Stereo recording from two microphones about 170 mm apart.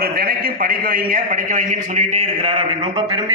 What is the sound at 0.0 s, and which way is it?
A man's voice, 65° right (ahead or behind).